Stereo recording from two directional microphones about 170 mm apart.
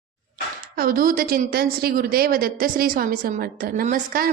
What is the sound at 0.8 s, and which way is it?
A woman's voice, 55° right (ahead or behind).